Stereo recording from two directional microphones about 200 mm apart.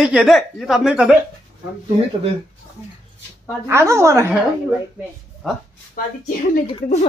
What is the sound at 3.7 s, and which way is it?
Speech, 15° right (ahead or behind).